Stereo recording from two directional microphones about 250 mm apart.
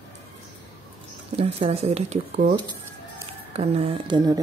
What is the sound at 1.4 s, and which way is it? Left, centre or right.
Speech, right.